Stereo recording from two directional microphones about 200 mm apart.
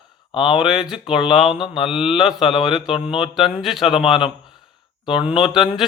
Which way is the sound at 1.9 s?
Centre (ahead or behind).